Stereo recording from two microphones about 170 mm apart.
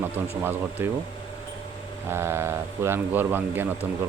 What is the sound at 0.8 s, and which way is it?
Speech, 10° right (ahead or behind).